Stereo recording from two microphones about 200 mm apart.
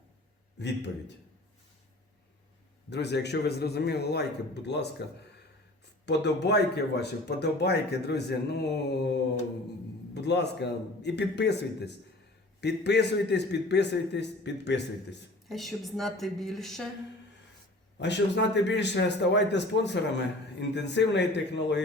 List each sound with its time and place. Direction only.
0.6 s a man's voice: 60° left (ahead or behind)
2.9 s a man's voice: 60° left (ahead or behind)
15.4 s a woman's voice: centre (ahead or behind)
17.9 s a man's voice: 60° left (ahead or behind)